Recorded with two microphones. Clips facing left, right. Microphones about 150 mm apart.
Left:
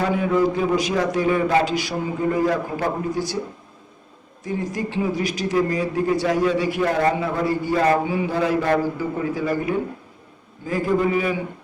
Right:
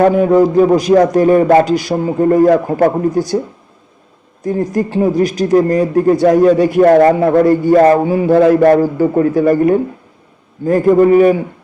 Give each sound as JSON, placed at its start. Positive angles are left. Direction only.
{"t": 0.0, "sound": "speech", "side_deg": -45}
{"t": 4.4, "sound": "speech", "side_deg": -45}